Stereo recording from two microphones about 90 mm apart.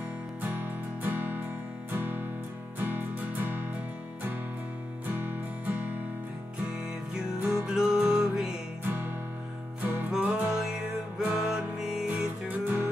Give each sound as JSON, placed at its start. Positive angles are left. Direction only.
{"t": 0.4, "sound": "music", "side_deg": -20}
{"t": 5.0, "sound": "music", "side_deg": -20}
{"t": 6.7, "sound": "music", "side_deg": -10}
{"t": 8.8, "sound": "music", "side_deg": -25}
{"t": 12.1, "sound": "music", "side_deg": -20}